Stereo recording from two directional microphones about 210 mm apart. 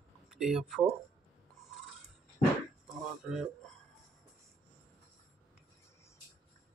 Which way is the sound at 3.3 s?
Centre (ahead or behind).